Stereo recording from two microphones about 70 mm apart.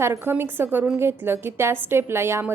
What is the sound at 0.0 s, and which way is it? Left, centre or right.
A woman's voice, right.